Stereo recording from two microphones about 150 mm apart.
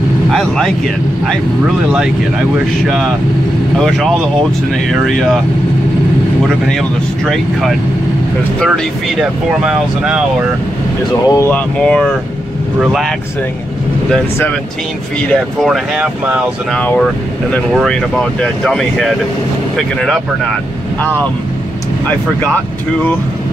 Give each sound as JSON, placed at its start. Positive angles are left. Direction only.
{"t": 0.3, "sound": "speech", "side_deg": 5}
{"t": 2.5, "sound": "speech", "side_deg": -5}
{"t": 8.5, "sound": "speech", "side_deg": 0}
{"t": 11.2, "sound": "speech", "side_deg": 20}
{"t": 11.5, "sound": "speech", "side_deg": 5}
{"t": 15.2, "sound": "speech", "side_deg": 0}
{"t": 16.7, "sound": "speech", "side_deg": 10}